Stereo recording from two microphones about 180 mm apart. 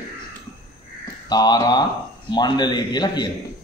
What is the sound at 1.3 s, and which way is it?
A man's voice, 20° left (ahead or behind).